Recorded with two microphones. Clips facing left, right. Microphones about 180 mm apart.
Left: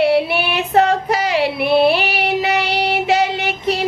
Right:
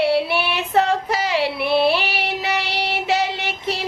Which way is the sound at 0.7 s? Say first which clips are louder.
Left 4 dB; 55° left (ahead or behind).